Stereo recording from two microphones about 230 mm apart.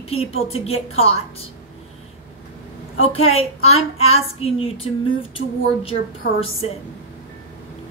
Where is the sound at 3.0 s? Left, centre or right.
Left.